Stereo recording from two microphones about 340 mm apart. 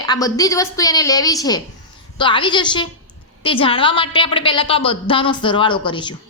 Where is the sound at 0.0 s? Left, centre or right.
Centre.